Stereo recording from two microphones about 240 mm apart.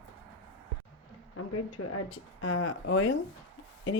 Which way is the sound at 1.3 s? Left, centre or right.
Left.